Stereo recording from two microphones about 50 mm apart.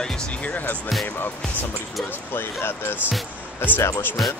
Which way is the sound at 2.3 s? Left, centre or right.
Left.